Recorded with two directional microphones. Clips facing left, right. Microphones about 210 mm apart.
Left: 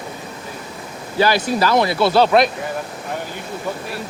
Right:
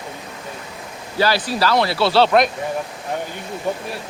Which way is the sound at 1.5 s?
50° left (ahead or behind).